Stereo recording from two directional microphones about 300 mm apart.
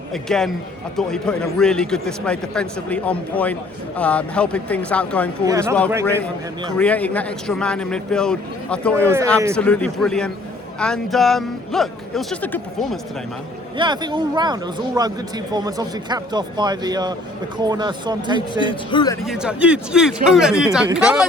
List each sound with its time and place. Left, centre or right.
0.1 s a man's voice: centre
5.5 s a man's voice: centre
6.7 s a man's voice: centre
13.7 s a man's voice: centre
18.6 s speech: centre
19.2 s a man's voice: centre